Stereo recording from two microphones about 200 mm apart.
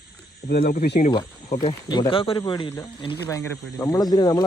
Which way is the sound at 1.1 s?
20° left (ahead or behind).